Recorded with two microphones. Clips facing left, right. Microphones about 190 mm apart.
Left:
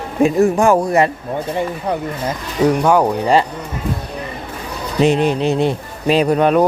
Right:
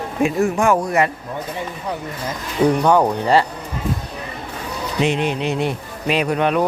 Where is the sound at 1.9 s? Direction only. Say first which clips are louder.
Left 4 dB; 55° left (ahead or behind).